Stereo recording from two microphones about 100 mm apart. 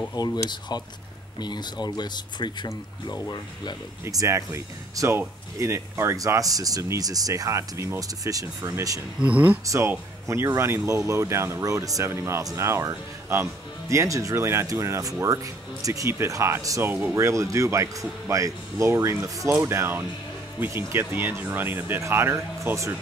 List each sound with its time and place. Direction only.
0.1 s speech: 45° left (ahead or behind)
4.0 s speech: 30° right (ahead or behind)
9.2 s speech: 15° right (ahead or behind)
9.7 s speech: 30° right (ahead or behind)
16.8 s speech: 20° right (ahead or behind)
17.2 s speech: 30° right (ahead or behind)